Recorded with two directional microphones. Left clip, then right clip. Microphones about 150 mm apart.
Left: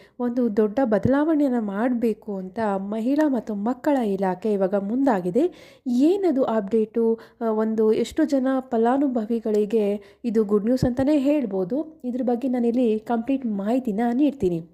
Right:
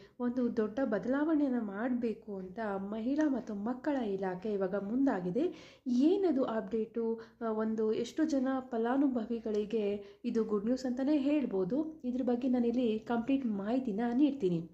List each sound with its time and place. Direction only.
0.2 s a woman's voice: 50° left (ahead or behind)